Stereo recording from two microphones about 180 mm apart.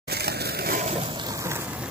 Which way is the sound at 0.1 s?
60° right (ahead or behind).